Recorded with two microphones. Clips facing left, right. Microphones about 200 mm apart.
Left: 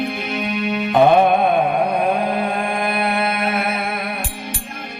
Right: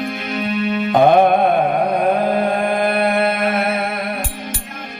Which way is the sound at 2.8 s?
50° right (ahead or behind).